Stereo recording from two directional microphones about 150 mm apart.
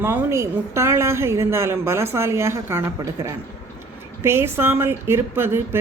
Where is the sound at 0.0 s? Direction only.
15° right (ahead or behind).